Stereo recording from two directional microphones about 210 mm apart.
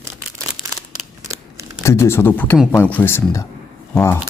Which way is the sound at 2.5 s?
Centre (ahead or behind).